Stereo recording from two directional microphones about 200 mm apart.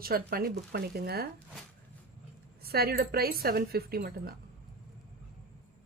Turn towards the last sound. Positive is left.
turn(degrees=-50)  # may be behind; listen again after turning